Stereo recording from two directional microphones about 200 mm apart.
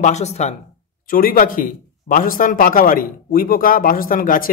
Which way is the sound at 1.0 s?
45° left (ahead or behind).